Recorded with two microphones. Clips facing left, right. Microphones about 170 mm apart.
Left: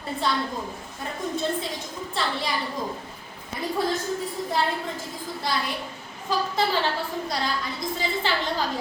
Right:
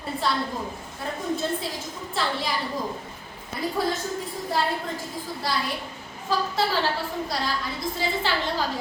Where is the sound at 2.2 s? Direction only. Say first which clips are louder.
Right 1 dB; centre (ahead or behind).